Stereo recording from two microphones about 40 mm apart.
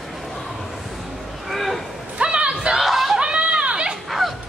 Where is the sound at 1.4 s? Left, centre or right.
Centre.